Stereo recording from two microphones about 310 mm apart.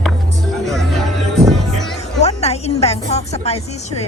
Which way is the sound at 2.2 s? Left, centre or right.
Centre.